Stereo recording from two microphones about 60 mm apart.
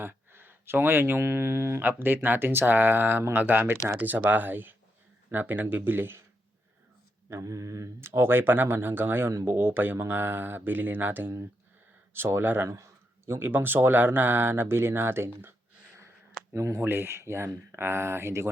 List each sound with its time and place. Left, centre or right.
0.0 s speech: right
1.8 s speech: right
7.3 s mantra: right
8.0 s speech: right
12.6 s speech: right
16.5 s speech: right
16.8 s speech: right